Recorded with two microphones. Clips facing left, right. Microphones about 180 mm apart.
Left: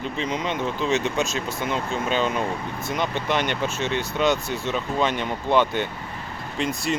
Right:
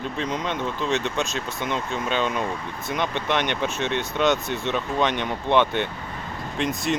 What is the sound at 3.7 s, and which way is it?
Speech, 60° right (ahead or behind).